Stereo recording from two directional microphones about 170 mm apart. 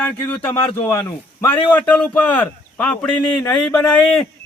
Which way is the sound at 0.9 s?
15° left (ahead or behind).